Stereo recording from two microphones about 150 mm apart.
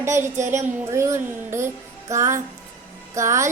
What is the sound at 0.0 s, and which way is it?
A woman's voice, 20° right (ahead or behind).